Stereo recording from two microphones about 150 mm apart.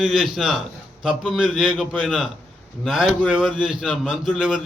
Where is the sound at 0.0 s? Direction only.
Centre (ahead or behind).